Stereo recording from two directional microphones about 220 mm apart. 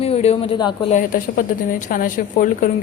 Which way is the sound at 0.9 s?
40° left (ahead or behind).